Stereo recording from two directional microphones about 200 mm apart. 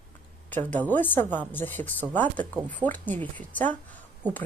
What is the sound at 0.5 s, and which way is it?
Speech, 10° left (ahead or behind).